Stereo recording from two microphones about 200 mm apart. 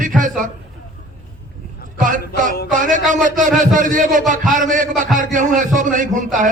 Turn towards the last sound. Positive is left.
turn(degrees=-40)  # may be behind; listen again after turning